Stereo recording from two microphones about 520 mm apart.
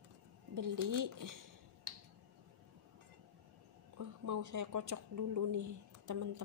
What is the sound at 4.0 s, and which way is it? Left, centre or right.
Speech, right.